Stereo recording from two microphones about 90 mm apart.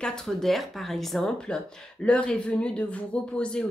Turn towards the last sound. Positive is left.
turn(degrees=10)  # may be behind; listen again after turning